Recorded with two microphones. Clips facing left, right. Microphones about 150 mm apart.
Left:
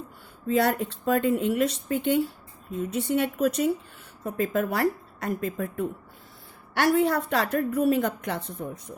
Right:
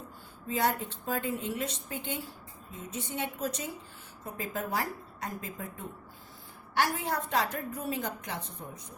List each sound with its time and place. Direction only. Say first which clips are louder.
0.4 s speech: left 7 dB; 65° left (ahead or behind)